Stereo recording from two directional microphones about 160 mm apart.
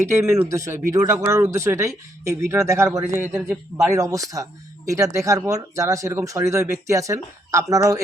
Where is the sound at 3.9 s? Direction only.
20° right (ahead or behind).